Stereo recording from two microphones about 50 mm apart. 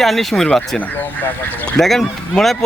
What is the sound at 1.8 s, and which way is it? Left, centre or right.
Speech, centre.